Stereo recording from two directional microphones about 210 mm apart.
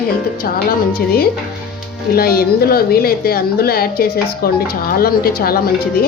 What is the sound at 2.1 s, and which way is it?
A woman's voice, 45° left (ahead or behind).